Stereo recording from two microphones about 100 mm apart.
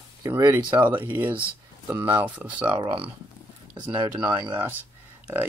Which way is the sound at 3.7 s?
50° right (ahead or behind).